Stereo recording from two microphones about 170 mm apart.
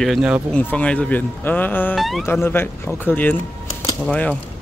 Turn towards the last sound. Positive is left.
turn(degrees=5)  # may be behind; listen again after turning